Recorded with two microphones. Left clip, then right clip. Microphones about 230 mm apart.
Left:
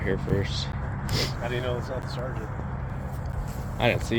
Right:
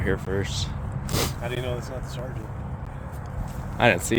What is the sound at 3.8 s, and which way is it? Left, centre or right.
Speech, right.